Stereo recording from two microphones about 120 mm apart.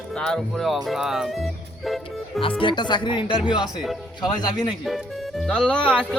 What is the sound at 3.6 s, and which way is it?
Speech, centre (ahead or behind).